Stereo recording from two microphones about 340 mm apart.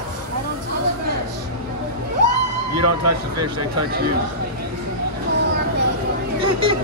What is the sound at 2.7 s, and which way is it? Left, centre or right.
Speech, right.